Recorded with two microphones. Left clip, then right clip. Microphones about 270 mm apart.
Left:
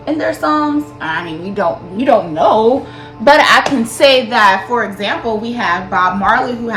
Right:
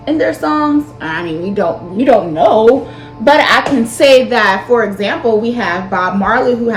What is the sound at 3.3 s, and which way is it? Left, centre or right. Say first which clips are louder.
Speech: left 1 dB; centre.